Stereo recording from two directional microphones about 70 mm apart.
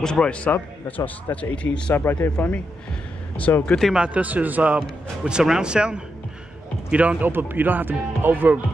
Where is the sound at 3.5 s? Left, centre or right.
Left.